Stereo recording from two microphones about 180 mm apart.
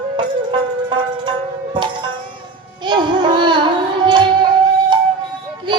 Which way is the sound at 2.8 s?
25° right (ahead or behind).